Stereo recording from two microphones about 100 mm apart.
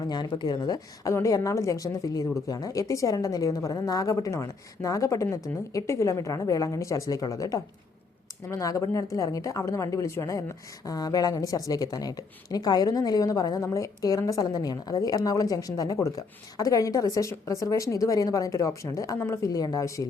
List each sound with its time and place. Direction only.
0.0 s speech: 45° left (ahead or behind)
1.0 s speech: 35° left (ahead or behind)
19.5 s speech: 40° left (ahead or behind)